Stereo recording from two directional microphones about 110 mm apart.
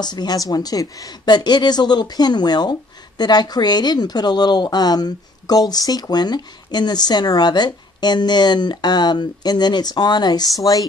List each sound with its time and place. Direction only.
0.0 s speech: 40° left (ahead or behind)